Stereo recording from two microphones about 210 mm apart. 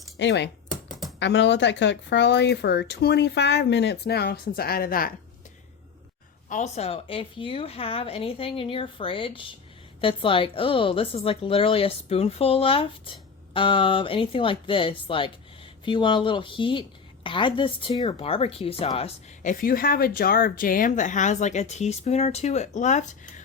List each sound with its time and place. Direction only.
0.2 s speech: 55° left (ahead or behind)
6.5 s speech: 35° left (ahead or behind)